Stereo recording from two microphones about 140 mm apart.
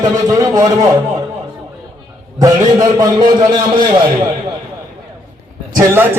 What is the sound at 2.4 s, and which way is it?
A man's voice, 25° right (ahead or behind).